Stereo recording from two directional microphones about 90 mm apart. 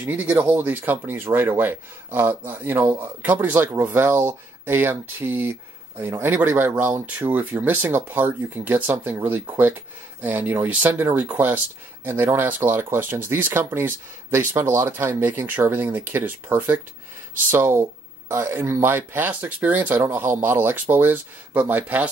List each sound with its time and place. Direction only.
0.0 s speech: 20° right (ahead or behind)